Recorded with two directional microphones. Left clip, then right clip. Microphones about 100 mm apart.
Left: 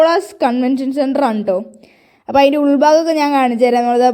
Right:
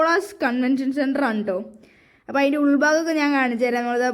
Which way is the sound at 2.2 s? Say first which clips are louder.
Left 9 dB; 45° left (ahead or behind).